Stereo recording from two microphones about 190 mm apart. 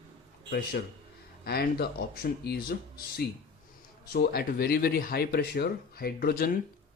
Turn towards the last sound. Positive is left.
turn(degrees=55)  # may be behind; listen again after turning